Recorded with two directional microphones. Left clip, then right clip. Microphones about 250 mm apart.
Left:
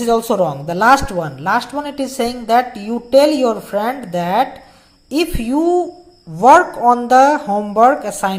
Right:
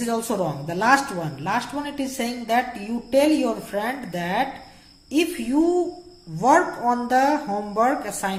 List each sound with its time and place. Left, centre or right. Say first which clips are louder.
0.0 s speech: left 10 dB; left